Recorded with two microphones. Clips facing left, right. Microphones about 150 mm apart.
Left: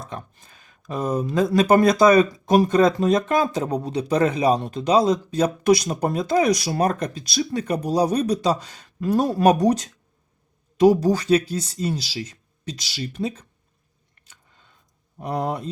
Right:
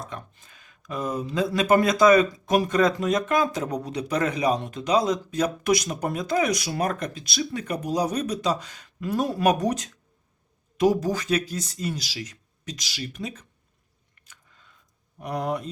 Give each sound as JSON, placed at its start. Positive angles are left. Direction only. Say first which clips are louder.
{"t": 0.0, "sound": "speech", "louder": "left 2 dB", "side_deg": 35}
{"t": 14.2, "sound": "chewing", "louder": "even", "side_deg": 30}
{"t": 15.2, "sound": "speech", "louder": "left 2 dB", "side_deg": 30}